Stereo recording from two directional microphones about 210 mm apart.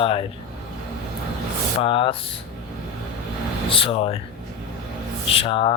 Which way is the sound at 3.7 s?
25° left (ahead or behind).